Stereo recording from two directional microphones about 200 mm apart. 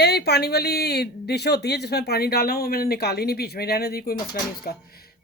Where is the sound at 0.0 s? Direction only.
55° left (ahead or behind).